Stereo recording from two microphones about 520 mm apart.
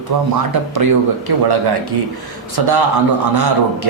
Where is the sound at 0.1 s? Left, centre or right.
Right.